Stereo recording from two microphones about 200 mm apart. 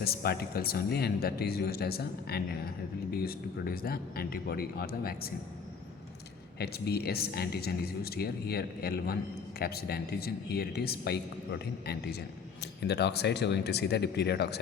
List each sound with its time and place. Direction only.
0.0 s speech: 50° left (ahead or behind)
6.6 s speech: 50° left (ahead or behind)